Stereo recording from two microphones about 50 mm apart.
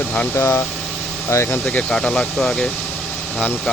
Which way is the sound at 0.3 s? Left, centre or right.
Left.